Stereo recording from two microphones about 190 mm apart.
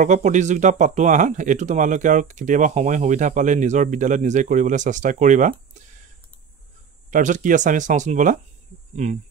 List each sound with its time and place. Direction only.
0.0 s speech: 40° right (ahead or behind)
7.1 s speech: 40° right (ahead or behind)